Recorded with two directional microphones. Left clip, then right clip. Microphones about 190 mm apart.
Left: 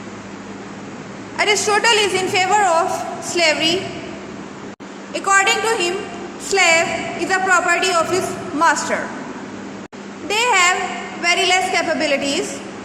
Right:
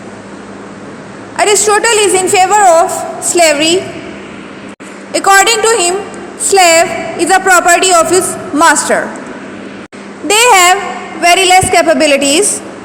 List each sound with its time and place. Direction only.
1.4 s a woman's voice: 35° right (ahead or behind)
5.1 s a woman's voice: 40° right (ahead or behind)
10.2 s a woman's voice: 45° right (ahead or behind)